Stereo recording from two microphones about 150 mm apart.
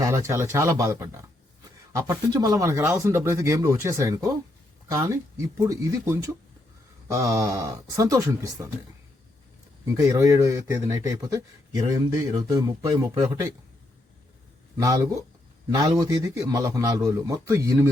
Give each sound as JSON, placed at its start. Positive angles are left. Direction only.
{"t": 0.0, "sound": "speech", "side_deg": -20}
{"t": 9.8, "sound": "speech", "side_deg": -20}
{"t": 14.8, "sound": "speech", "side_deg": -20}